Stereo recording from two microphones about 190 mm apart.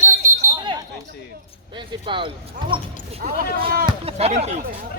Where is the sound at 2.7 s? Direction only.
50° right (ahead or behind).